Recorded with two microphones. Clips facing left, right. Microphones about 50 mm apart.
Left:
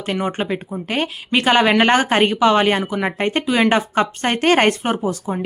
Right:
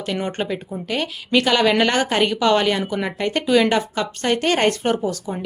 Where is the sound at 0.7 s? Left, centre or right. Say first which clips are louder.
Left 2 dB; left.